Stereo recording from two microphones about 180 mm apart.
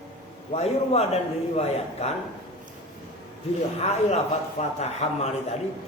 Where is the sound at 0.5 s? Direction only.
35° left (ahead or behind).